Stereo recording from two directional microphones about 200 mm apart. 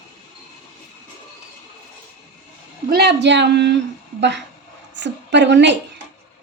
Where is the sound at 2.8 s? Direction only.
55° right (ahead or behind).